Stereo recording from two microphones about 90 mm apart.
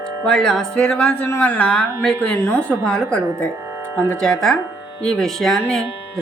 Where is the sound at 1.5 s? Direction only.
10° left (ahead or behind).